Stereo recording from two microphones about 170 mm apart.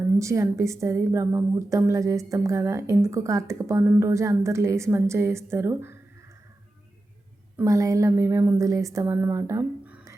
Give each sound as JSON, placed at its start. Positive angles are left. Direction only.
{"t": 0.0, "sound": "a woman's voice", "side_deg": -15}
{"t": 7.5, "sound": "a woman's voice", "side_deg": -20}